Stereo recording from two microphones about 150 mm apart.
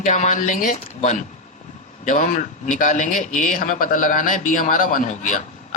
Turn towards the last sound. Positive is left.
turn(degrees=55)  # may be behind; listen again after turning